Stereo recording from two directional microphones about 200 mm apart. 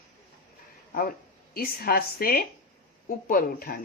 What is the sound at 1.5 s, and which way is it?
A woman's voice, 50° left (ahead or behind).